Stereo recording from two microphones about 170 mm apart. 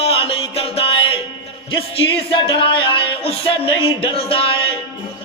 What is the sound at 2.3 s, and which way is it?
Speech, 30° left (ahead or behind).